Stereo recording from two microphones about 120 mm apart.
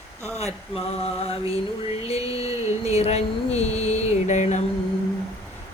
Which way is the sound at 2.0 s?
55° left (ahead or behind).